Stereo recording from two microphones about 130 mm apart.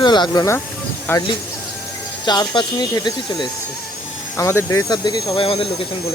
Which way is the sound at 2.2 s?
35° left (ahead or behind).